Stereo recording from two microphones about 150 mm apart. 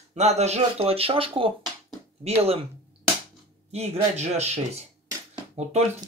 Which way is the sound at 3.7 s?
50° right (ahead or behind).